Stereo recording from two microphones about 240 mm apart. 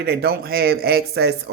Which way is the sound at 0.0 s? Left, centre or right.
Right.